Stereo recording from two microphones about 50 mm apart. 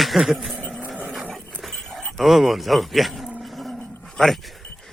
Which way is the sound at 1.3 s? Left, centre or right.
Centre.